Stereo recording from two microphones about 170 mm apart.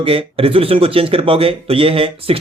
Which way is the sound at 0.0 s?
35° right (ahead or behind).